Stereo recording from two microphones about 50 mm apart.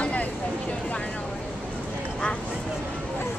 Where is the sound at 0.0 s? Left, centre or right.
Left.